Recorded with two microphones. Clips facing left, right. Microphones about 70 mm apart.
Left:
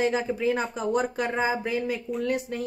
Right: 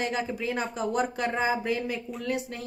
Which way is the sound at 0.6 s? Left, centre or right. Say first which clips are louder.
Left 2 dB; centre.